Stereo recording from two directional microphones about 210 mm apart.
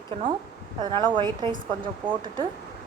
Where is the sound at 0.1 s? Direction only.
25° right (ahead or behind).